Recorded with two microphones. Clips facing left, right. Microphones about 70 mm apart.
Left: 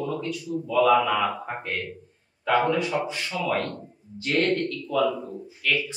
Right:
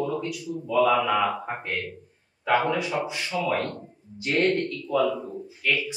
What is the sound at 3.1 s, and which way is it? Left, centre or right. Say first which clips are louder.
Speech: right 1 dB; centre.